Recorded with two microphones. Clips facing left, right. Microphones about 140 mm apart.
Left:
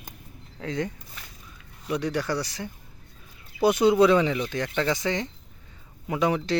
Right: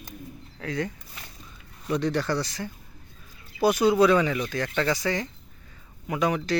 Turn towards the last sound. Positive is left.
turn(degrees=25)  # may be behind; listen again after turning